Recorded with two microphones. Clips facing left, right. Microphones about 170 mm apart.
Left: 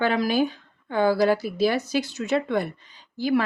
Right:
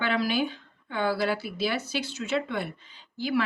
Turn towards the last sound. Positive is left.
turn(degrees=45)  # may be behind; listen again after turning